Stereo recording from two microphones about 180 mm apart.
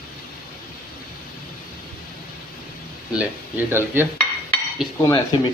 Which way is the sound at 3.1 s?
10° right (ahead or behind).